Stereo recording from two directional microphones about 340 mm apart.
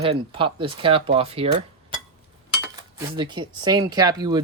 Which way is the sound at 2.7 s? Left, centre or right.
Centre.